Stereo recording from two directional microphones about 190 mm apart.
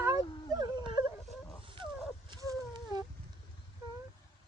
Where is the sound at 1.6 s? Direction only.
25° right (ahead or behind).